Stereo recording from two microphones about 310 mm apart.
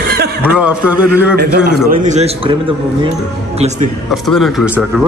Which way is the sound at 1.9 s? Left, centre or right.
Right.